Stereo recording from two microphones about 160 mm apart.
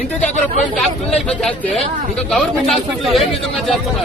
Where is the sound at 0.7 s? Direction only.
5° left (ahead or behind).